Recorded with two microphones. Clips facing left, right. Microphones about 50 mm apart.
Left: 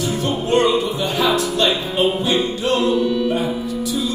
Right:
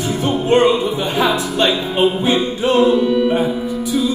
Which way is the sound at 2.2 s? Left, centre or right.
Right.